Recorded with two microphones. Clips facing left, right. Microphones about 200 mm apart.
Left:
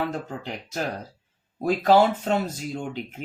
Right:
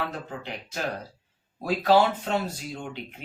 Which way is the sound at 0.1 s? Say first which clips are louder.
Left 4 dB; 45° left (ahead or behind).